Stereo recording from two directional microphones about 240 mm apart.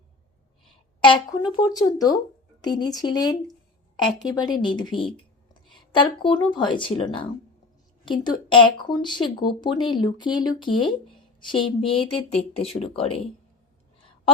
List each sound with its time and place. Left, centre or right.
1.0 s a woman's voice: centre